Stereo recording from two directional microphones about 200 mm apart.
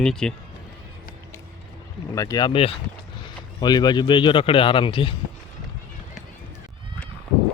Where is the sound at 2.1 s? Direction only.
15° left (ahead or behind).